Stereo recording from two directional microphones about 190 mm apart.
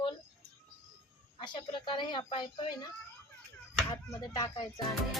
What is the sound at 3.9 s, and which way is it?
Speech, 20° left (ahead or behind).